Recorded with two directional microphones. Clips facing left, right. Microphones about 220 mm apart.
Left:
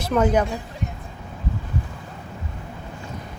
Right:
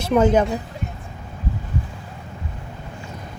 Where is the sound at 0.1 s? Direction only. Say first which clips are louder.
Right 3 dB; 5° right (ahead or behind).